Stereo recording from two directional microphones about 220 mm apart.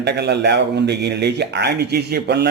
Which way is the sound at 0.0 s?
50° right (ahead or behind).